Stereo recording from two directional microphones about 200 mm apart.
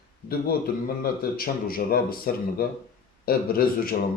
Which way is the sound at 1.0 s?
50° left (ahead or behind).